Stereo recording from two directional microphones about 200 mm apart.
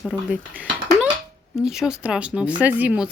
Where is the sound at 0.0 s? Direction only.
5° right (ahead or behind).